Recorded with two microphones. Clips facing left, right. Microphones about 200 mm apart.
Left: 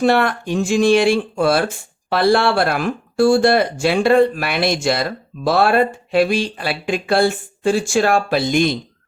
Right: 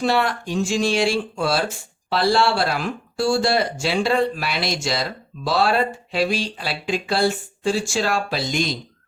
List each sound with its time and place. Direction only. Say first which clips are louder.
0.0 s speech: left 5 dB; 55° left (ahead or behind)